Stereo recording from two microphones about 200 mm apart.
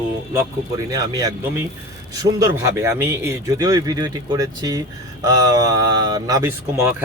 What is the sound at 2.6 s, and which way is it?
Speech, 15° right (ahead or behind).